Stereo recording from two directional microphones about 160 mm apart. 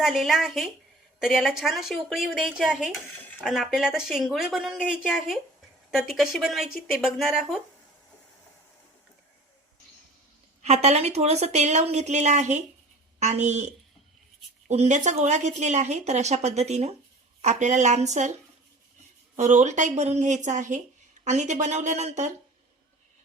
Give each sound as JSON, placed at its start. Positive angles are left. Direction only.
{"t": 0.0, "sound": "speech", "side_deg": 0}
{"t": 10.6, "sound": "a woman's voice", "side_deg": -45}
{"t": 14.7, "sound": "a woman's voice", "side_deg": -45}
{"t": 19.4, "sound": "a woman's voice", "side_deg": -45}